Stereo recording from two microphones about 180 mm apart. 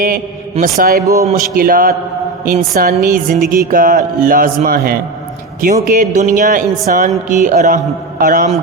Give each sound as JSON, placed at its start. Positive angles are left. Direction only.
{"t": 0.8, "sound": "a man's voice", "side_deg": -55}
{"t": 1.0, "sound": "a man's voice", "side_deg": -20}
{"t": 1.4, "sound": "speech", "side_deg": -55}